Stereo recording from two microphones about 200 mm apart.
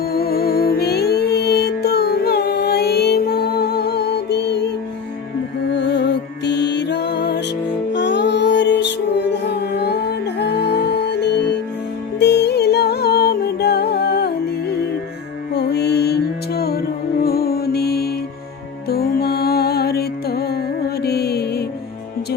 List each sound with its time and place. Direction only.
0.0 s music: 50° left (ahead or behind)
5.7 s music: 60° left (ahead or behind)